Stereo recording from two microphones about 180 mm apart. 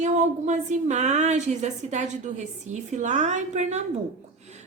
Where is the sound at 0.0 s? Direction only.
40° right (ahead or behind).